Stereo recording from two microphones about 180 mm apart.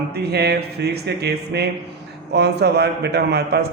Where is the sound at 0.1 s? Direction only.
65° right (ahead or behind).